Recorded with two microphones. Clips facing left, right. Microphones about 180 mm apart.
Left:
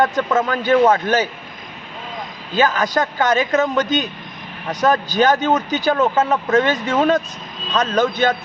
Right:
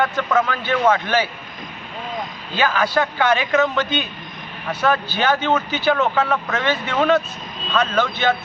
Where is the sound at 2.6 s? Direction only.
40° left (ahead or behind).